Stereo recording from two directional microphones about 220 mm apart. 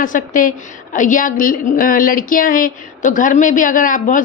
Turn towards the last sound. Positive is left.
turn(degrees=35)  # may be behind; listen again after turning